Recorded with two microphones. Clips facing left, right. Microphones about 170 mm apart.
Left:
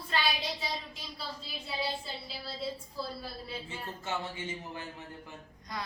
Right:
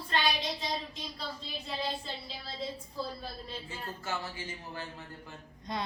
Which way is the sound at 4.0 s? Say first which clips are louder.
Left 2 dB; 20° left (ahead or behind).